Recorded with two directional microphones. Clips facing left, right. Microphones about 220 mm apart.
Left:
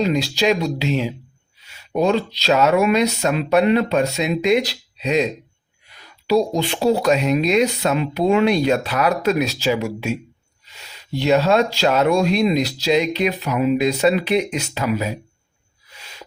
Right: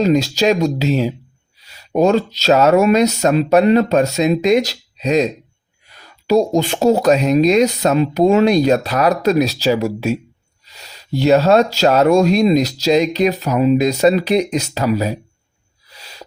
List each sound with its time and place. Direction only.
0.0 s speech: 45° right (ahead or behind)
15.9 s owl: 40° right (ahead or behind)